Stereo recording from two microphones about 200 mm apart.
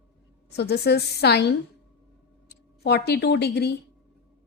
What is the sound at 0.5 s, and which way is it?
A woman's voice, 55° left (ahead or behind).